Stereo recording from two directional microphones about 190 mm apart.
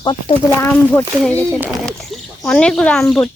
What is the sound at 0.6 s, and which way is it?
Speech, 10° left (ahead or behind).